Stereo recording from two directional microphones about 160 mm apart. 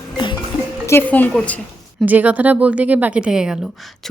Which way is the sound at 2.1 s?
10° right (ahead or behind).